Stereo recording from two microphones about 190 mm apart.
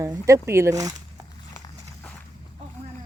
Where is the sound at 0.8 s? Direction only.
20° right (ahead or behind).